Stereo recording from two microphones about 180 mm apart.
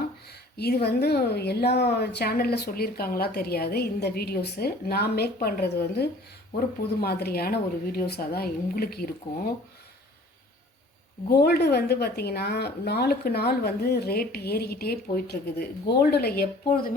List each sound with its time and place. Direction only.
0.3 s speech: 65° left (ahead or behind)
11.3 s speech: 60° left (ahead or behind)